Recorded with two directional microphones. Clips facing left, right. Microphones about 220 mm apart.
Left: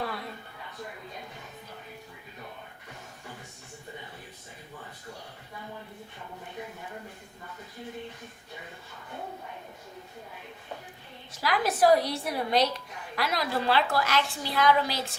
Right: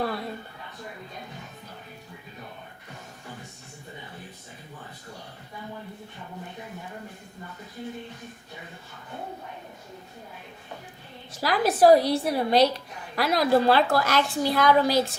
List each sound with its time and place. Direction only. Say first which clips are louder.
11.3 s a woman's voice: right 4 dB; 35° right (ahead or behind)